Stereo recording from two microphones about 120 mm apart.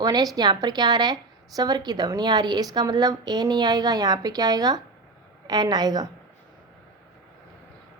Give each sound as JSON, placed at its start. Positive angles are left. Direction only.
{"t": 0.0, "sound": "a woman's voice", "side_deg": -35}